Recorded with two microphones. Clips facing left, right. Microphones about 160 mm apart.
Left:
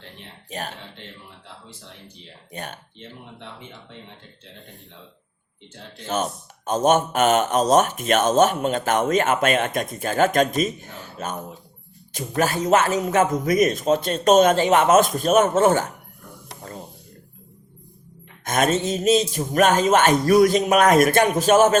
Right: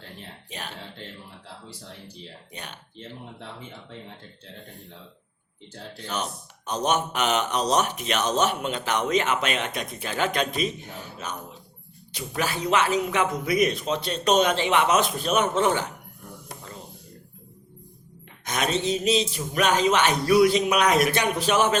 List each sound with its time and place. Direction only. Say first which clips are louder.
0.5 s a man's voice: left 7 dB; 45° left (ahead or behind)
2.5 s a man's voice: left 9 dB; 45° left (ahead or behind)
6.1 s a man's voice: left 7 dB; 45° left (ahead or behind)
18.4 s a man's voice: left 5 dB; 50° left (ahead or behind)